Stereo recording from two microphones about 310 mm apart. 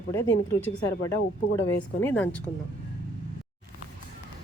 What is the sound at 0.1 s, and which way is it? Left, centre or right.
Speech, centre.